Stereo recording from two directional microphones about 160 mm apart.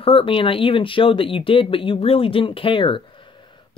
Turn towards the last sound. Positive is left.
turn(degrees=30)  # may be behind; listen again after turning